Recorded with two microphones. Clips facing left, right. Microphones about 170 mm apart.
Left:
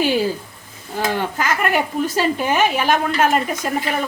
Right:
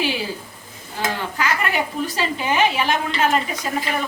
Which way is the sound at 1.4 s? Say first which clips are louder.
Left 1 dB; 50° left (ahead or behind).